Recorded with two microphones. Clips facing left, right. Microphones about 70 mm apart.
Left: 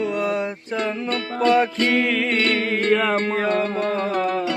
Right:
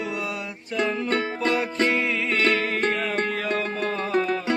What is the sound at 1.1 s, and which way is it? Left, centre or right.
Music, right.